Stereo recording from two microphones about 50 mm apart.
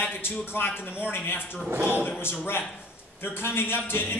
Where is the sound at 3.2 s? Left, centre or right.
Left.